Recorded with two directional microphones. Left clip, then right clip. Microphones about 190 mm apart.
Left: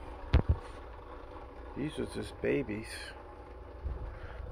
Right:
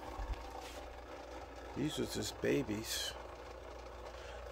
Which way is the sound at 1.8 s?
10° right (ahead or behind).